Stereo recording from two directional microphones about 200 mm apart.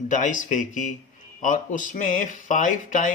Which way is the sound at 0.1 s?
40° left (ahead or behind).